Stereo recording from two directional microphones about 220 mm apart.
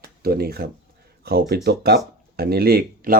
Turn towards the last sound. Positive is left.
turn(degrees=-40)  # may be behind; listen again after turning